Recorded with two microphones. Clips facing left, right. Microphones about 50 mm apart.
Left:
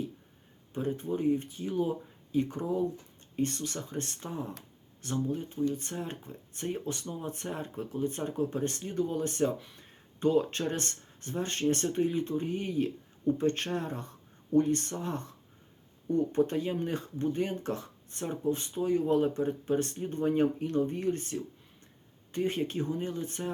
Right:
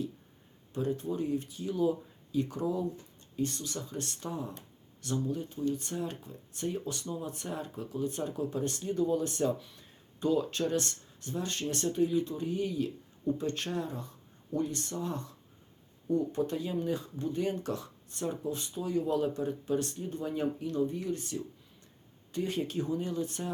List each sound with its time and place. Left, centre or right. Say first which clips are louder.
0.7 s speech: even; left